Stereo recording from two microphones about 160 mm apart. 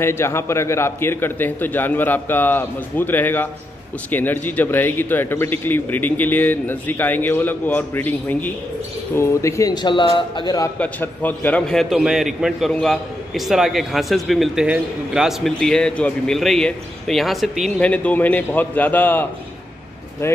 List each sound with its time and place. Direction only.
0.0 s speech: 15° left (ahead or behind)
10.8 s a man's voice: 10° left (ahead or behind)